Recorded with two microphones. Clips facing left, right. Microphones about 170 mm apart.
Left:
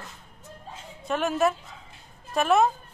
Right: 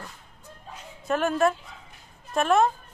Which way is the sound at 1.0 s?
Centre (ahead or behind).